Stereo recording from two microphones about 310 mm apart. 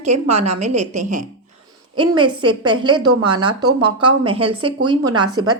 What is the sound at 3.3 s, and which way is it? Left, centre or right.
Speech, right.